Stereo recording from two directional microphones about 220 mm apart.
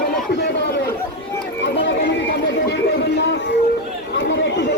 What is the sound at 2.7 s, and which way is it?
Music, 50° left (ahead or behind).